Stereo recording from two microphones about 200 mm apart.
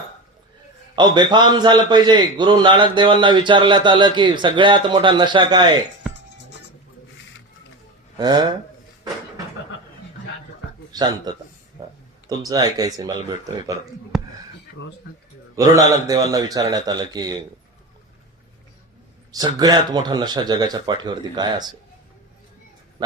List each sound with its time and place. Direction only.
0.9 s a man's voice: 20° right (ahead or behind)
8.2 s a man's voice: 20° right (ahead or behind)
10.9 s a man's voice: 20° right (ahead or behind)
11.8 s a sound: 20° right (ahead or behind)
12.4 s a man's voice: 20° right (ahead or behind)
15.5 s a man's voice: 15° right (ahead or behind)
19.3 s a man's voice: 20° right (ahead or behind)
23.0 s a sound: 20° right (ahead or behind)